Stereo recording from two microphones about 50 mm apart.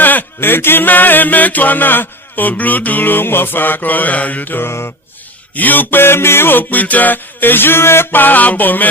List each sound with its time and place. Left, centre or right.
0.0 s a sound: left
0.3 s music: left
8.2 s music: left